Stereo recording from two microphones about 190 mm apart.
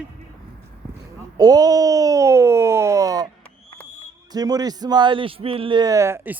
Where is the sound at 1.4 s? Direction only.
20° right (ahead or behind).